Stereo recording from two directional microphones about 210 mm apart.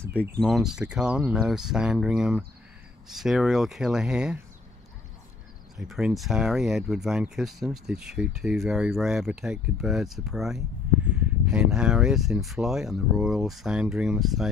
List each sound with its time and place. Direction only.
0.4 s speech: centre (ahead or behind)
5.8 s speech: centre (ahead or behind)